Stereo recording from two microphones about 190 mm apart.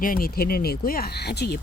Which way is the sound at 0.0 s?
50° left (ahead or behind).